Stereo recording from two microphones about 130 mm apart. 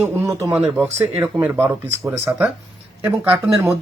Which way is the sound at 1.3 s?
15° right (ahead or behind).